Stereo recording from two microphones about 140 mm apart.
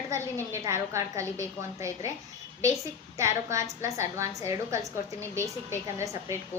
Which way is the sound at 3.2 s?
20° right (ahead or behind).